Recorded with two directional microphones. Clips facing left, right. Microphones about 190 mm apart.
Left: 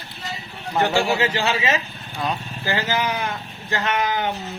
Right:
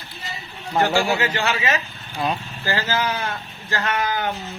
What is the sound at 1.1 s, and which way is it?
Speech, 25° left (ahead or behind).